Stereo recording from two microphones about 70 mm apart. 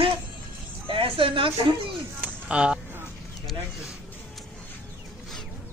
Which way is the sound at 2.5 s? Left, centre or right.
Centre.